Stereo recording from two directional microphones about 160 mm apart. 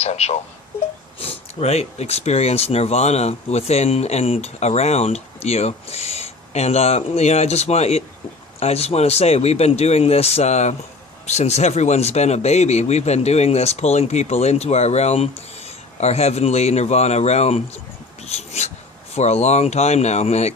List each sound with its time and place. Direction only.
0.0 s speech: 40° left (ahead or behind)
18.3 s a sound: 40° left (ahead or behind)
19.1 s speech: 45° left (ahead or behind)